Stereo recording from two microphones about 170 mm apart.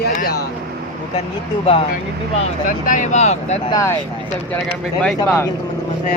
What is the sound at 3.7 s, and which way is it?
Speech, 20° left (ahead or behind).